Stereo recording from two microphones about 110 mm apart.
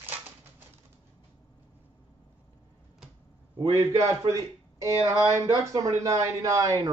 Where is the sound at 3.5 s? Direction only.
30° right (ahead or behind).